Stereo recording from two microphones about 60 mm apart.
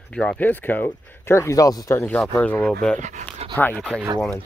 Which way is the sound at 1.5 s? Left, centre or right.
Left.